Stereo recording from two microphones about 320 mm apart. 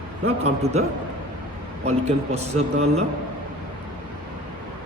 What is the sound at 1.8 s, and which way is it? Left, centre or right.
A man's voice, centre.